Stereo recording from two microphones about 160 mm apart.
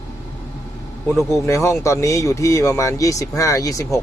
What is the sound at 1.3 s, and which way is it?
Speech, 15° left (ahead or behind).